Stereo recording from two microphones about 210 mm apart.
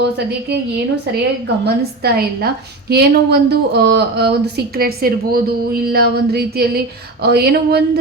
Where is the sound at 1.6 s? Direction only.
50° right (ahead or behind).